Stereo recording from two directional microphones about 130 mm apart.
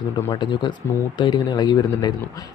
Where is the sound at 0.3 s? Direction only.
35° left (ahead or behind).